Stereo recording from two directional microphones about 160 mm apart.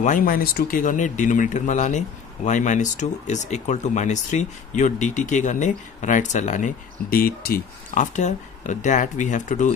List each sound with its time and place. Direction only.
0.0 s speech: 55° left (ahead or behind)